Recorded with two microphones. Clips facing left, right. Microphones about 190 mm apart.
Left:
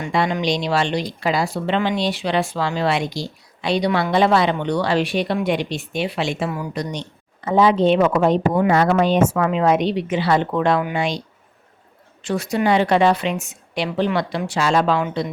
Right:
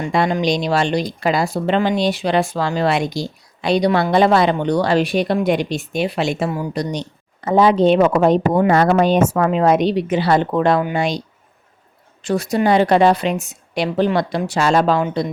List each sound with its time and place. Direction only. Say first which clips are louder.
0.1 s speech: right 2 dB; 40° right (ahead or behind)
7.4 s speech: right 2 dB; 45° right (ahead or behind)
12.2 s speech: right 3 dB; 40° right (ahead or behind)